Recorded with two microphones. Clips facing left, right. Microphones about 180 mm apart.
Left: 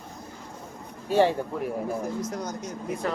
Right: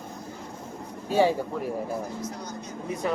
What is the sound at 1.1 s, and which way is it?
Speech, 10° right (ahead or behind).